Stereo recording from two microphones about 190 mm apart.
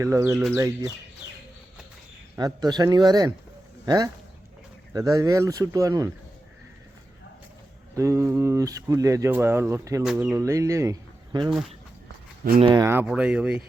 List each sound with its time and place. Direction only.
0.0 s speech: 15° right (ahead or behind)
2.3 s speech: 20° right (ahead or behind)
7.9 s speech: 15° right (ahead or behind)
10.0 s speech: 5° right (ahead or behind)
10.3 s speech: 15° right (ahead or behind)
12.5 s speech: 25° right (ahead or behind)
12.8 s speech: 10° right (ahead or behind)